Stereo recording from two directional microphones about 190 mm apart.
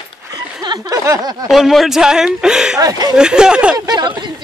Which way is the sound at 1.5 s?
Centre (ahead or behind).